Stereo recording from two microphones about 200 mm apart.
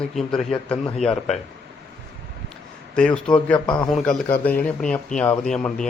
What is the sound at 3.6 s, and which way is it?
Speech, 25° left (ahead or behind).